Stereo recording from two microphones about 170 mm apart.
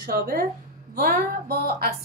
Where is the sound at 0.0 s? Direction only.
65° right (ahead or behind).